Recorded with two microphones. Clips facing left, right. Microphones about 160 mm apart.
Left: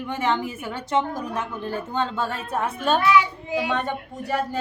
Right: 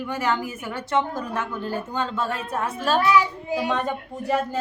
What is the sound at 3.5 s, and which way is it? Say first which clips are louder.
Speech: even; 5° right (ahead or behind).